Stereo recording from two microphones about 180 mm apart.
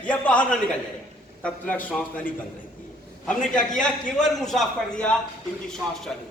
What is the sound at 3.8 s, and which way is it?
A man's voice, centre (ahead or behind).